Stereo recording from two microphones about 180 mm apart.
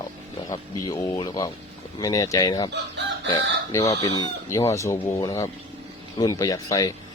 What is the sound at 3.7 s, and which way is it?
A man's voice, 20° left (ahead or behind).